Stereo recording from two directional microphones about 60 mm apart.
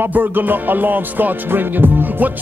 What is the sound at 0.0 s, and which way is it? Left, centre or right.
Music, right.